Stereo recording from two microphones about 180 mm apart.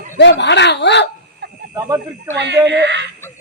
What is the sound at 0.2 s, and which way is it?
Speech, 75° left (ahead or behind).